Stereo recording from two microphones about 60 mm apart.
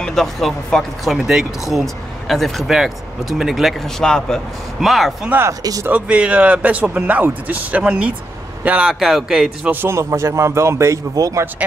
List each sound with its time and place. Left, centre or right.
0.0 s speech: centre
1.0 s speech: centre
2.7 s speech: centre
5.5 s speech: right
5.9 s speech: right
8.8 s speech: centre
9.8 s a man's voice: right
11.1 s speech: right